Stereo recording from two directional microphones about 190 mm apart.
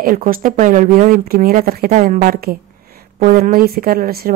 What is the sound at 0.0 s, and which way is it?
Speech, 50° right (ahead or behind).